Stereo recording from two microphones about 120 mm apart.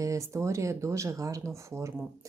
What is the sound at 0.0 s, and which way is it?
Speech, 25° right (ahead or behind).